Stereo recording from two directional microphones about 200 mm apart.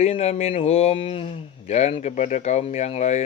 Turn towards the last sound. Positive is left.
turn(degrees=35)  # may be behind; listen again after turning